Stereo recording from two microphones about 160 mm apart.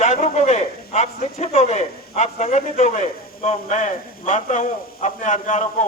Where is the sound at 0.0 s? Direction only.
45° left (ahead or behind).